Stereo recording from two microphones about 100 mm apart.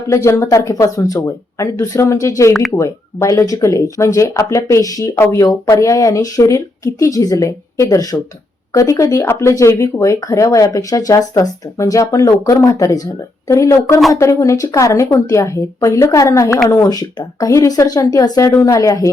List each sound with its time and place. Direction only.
0.1 s speech: 30° left (ahead or behind)
2.5 s speech: 5° left (ahead or behind)
2.7 s speech: 30° left (ahead or behind)
14.1 s speech: 30° left (ahead or behind)